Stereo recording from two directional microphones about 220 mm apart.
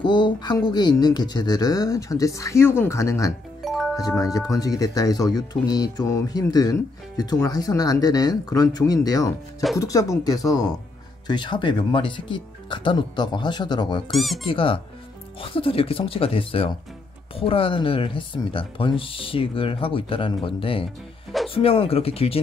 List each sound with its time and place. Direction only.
0.0 s speech: 20° left (ahead or behind)
3.6 s music: centre (ahead or behind)
3.9 s speech: 15° left (ahead or behind)
14.1 s speech: centre (ahead or behind)
14.5 s speech: 25° left (ahead or behind)